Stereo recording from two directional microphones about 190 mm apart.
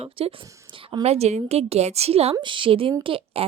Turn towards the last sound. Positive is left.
turn(degrees=-25)  # may be behind; listen again after turning